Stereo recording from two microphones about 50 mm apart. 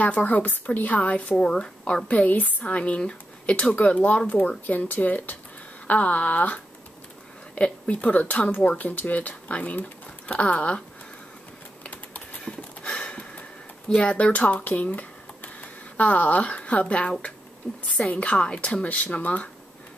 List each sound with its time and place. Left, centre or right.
0.0 s a woman's voice: left
1.4 s a woman's voice: centre
11.8 s typing: left
12.4 s a sound: left
13.8 s speech: left